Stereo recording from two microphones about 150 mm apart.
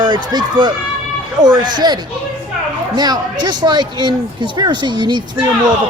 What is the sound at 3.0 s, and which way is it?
Speech, 25° right (ahead or behind).